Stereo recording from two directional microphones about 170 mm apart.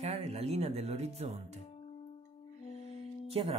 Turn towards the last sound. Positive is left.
turn(degrees=-35)  # may be behind; listen again after turning